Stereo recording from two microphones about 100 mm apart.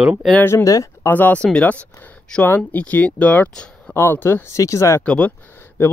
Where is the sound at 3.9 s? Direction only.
20° left (ahead or behind).